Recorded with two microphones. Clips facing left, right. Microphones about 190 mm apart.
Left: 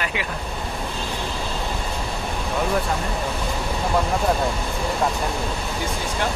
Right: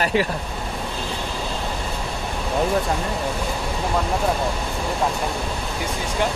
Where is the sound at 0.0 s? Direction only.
35° right (ahead or behind).